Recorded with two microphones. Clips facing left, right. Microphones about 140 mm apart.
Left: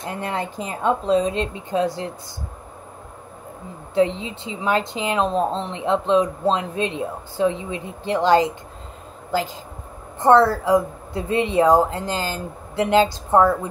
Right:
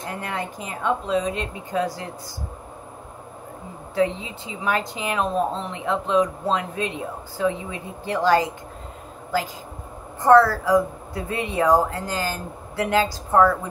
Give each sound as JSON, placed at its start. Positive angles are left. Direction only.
{"t": 0.0, "sound": "speech", "side_deg": 25}
{"t": 3.9, "sound": "speech", "side_deg": 25}